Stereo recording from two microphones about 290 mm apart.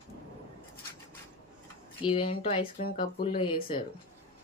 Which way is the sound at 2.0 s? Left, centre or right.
Centre.